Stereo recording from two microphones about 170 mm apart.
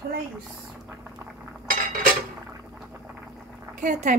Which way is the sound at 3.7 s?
50° right (ahead or behind).